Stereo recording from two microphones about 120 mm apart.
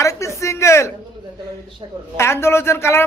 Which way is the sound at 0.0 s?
25° left (ahead or behind).